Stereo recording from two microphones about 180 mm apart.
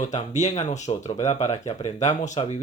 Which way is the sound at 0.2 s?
40° left (ahead or behind).